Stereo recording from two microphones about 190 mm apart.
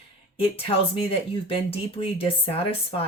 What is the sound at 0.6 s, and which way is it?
Speech, 30° left (ahead or behind).